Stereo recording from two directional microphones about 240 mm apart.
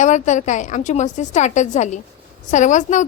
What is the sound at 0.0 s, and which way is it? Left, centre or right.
A woman's voice, left.